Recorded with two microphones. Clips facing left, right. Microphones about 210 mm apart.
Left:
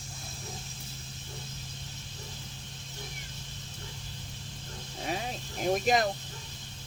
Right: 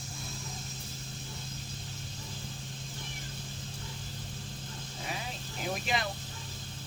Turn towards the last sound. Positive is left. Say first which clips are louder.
# left 8 dB
turn(degrees=45)  # may be behind; listen again after turning